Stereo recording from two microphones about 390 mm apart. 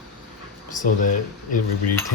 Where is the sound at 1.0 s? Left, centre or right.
Left.